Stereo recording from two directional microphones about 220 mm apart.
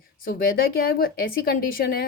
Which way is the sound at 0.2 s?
40° left (ahead or behind).